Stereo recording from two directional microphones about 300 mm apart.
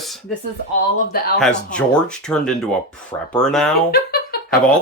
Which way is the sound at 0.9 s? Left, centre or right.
Left.